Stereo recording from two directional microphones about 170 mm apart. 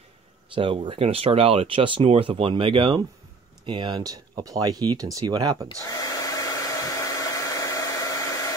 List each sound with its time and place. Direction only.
0.6 s speech: 30° right (ahead or behind)
5.9 s hair dryer: 20° left (ahead or behind)